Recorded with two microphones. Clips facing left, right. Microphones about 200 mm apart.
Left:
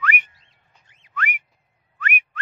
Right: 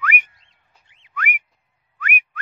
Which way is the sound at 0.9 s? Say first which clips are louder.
Left 2 dB; 40° left (ahead or behind).